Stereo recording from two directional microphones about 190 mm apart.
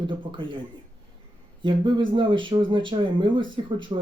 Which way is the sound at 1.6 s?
25° right (ahead or behind).